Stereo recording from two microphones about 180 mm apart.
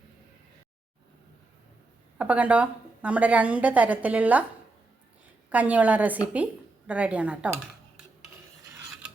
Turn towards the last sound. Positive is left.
turn(degrees=-5)  # may be behind; listen again after turning